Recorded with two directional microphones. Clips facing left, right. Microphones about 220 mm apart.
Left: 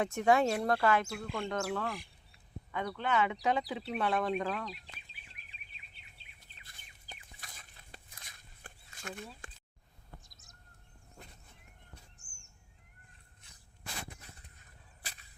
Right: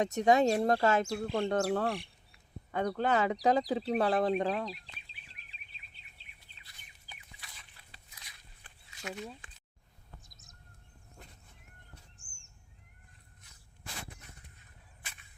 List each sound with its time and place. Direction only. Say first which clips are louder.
0.2 s speech: right 3 dB; 20° right (ahead or behind)
1.0 s speech: right 6 dB; 35° right (ahead or behind)
6.6 s a sound: left 1 dB; 50° left (ahead or behind)
15.0 s whip: left 2 dB; 35° left (ahead or behind)